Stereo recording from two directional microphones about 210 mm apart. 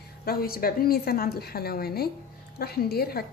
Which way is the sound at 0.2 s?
45° left (ahead or behind).